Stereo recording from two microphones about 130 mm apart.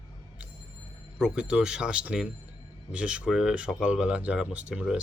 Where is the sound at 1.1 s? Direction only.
5° right (ahead or behind).